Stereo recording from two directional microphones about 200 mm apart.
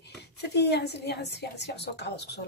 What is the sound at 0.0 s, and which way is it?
A woman's voice, 55° left (ahead or behind).